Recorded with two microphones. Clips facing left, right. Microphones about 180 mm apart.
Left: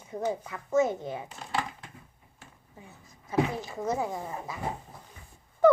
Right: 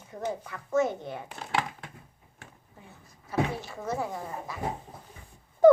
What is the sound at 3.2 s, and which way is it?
Speech, 20° left (ahead or behind).